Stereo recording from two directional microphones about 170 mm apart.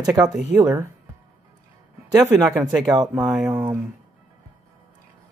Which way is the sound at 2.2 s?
20° right (ahead or behind).